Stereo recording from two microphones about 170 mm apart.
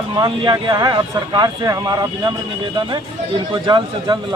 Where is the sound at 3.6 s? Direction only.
25° right (ahead or behind).